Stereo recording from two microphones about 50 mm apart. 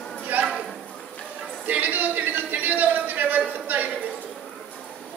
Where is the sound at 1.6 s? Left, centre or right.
Right.